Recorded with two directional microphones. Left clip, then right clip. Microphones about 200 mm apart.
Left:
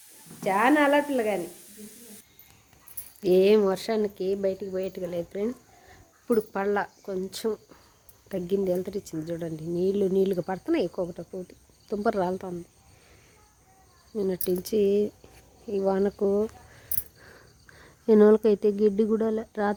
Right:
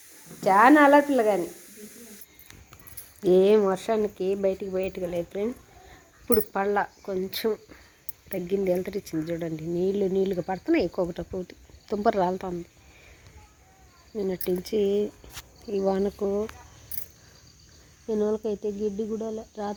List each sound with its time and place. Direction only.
0.4 s a woman's voice: 5° right (ahead or behind)
3.2 s speech: 10° left (ahead or behind)
8.3 s speech: 25° left (ahead or behind)
8.6 s speech: 10° left (ahead or behind)
10.9 s a woman's voice: 5° right (ahead or behind)
11.9 s speech: 10° left (ahead or behind)
14.2 s speech: 20° left (ahead or behind)
15.7 s a woman's voice: 5° left (ahead or behind)
16.1 s speech: 20° left (ahead or behind)
18.0 s speech: 40° left (ahead or behind)